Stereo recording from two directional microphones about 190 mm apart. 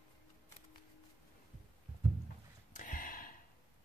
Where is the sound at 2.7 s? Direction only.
45° left (ahead or behind).